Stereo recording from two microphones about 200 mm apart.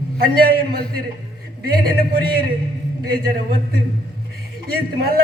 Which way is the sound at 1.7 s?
50° right (ahead or behind).